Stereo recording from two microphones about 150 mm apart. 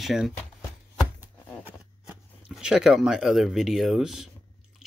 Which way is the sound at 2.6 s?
5° right (ahead or behind).